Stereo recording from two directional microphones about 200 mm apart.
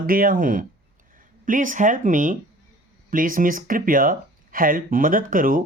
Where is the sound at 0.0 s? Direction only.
45° right (ahead or behind).